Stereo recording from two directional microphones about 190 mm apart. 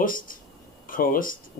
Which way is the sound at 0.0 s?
45° left (ahead or behind).